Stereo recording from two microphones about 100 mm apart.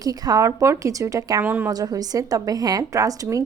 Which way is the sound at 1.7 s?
40° right (ahead or behind).